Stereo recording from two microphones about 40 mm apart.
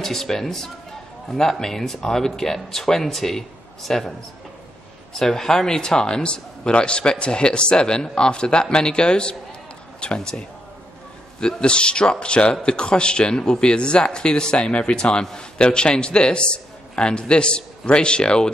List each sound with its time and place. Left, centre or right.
0.0 s speech: centre
5.1 s a man's voice: centre